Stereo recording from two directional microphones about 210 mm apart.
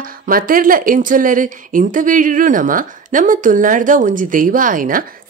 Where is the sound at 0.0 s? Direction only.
40° right (ahead or behind).